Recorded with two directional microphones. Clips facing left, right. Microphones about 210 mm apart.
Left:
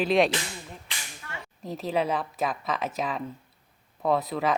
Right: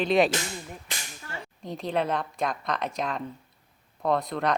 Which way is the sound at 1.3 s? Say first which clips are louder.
Right 2 dB; 30° right (ahead or behind).